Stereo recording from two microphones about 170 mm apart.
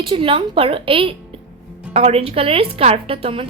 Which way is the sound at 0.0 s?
30° right (ahead or behind).